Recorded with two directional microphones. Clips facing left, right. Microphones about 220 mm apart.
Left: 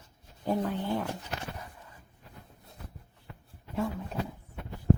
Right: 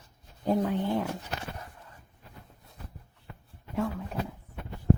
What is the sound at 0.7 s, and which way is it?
Speech, 20° right (ahead or behind).